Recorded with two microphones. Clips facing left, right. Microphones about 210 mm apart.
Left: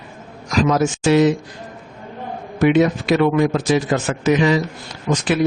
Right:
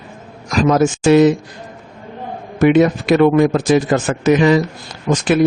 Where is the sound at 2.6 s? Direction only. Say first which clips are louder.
Right 3 dB; 50° right (ahead or behind).